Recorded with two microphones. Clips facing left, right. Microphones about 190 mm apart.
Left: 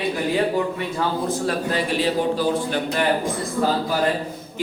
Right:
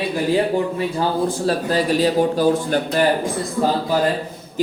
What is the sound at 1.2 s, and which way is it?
A man's voice, 35° right (ahead or behind).